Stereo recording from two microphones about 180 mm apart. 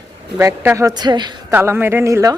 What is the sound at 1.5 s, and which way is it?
Speech, 10° right (ahead or behind).